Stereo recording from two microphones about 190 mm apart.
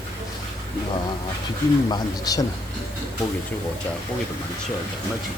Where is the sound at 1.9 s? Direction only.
20° left (ahead or behind).